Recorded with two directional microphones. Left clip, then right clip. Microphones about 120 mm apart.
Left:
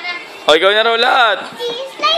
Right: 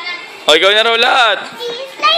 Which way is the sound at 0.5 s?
15° right (ahead or behind).